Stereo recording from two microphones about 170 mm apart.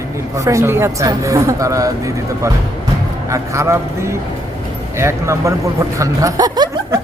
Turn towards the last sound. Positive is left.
turn(degrees=-25)  # may be behind; listen again after turning